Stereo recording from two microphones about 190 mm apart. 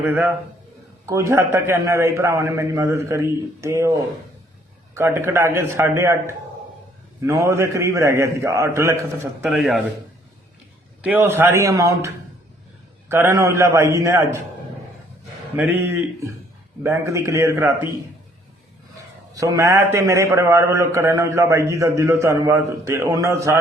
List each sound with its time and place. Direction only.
0.0 s a man's voice: 10° right (ahead or behind)
9.4 s speech: centre (ahead or behind)
11.0 s a man's voice: 10° right (ahead or behind)
15.5 s a man's voice: 10° right (ahead or behind)
19.3 s a man's voice: 15° right (ahead or behind)